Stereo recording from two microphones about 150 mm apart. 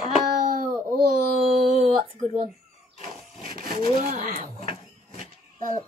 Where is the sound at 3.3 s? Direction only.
45° left (ahead or behind).